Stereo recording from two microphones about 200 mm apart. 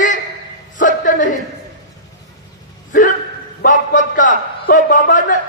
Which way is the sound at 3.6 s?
40° left (ahead or behind).